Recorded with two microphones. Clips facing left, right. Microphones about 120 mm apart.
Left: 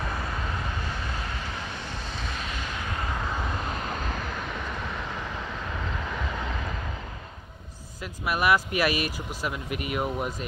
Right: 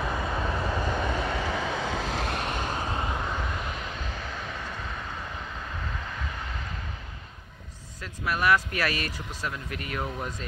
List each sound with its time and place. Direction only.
2.0 s vehicle: 90° right; by 3.0 s 35° right (ahead or behind)
8.3 s speech: 15° left (ahead or behind)